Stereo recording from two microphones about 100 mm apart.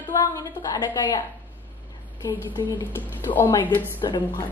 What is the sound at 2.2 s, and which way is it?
Speech, 35° left (ahead or behind).